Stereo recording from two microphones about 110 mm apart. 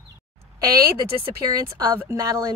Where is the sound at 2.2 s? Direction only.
35° right (ahead or behind).